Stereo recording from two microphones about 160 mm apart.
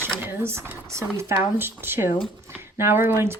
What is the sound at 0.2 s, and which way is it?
A woman's voice, 15° right (ahead or behind).